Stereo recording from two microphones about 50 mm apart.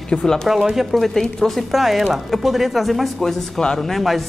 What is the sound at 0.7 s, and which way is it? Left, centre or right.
Speech, centre.